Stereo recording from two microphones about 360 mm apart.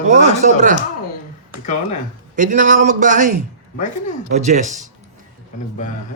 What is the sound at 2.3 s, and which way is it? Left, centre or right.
Speech, right.